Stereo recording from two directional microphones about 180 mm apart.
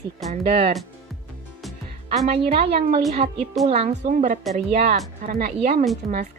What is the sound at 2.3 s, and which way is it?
Speech, 35° right (ahead or behind).